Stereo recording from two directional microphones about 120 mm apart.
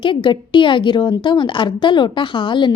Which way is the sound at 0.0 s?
45° left (ahead or behind).